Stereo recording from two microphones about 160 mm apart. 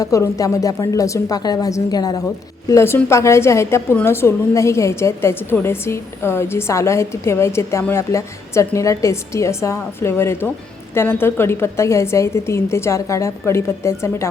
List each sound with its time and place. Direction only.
0.0 s a woman's voice: 20° left (ahead or behind)